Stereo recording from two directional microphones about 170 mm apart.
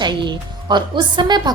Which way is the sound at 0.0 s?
25° right (ahead or behind).